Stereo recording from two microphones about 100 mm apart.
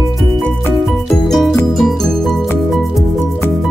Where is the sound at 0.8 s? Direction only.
Centre (ahead or behind).